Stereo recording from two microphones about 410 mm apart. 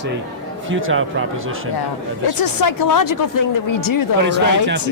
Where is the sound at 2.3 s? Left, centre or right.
Left.